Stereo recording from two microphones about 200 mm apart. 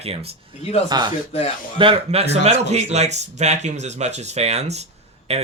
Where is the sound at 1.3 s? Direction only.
30° left (ahead or behind).